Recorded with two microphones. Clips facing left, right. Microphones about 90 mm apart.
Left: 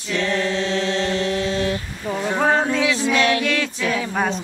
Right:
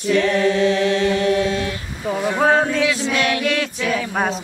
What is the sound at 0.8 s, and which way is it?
Chant, 30° left (ahead or behind).